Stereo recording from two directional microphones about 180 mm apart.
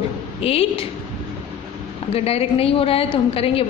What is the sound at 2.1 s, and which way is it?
A woman's voice, 35° left (ahead or behind).